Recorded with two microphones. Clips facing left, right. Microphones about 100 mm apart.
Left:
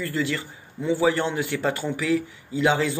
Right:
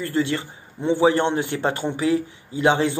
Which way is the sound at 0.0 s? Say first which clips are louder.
Right 4 dB; 25° right (ahead or behind).